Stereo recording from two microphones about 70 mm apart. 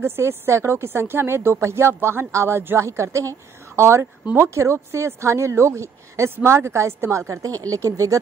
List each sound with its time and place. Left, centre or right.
0.0 s a woman's voice: right